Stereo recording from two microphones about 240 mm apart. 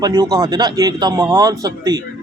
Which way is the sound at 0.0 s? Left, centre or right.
Centre.